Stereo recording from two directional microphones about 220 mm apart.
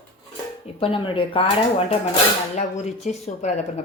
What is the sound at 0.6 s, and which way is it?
Speech, 25° left (ahead or behind).